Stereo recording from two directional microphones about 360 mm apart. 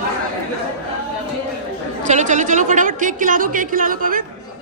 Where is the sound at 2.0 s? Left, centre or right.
Centre.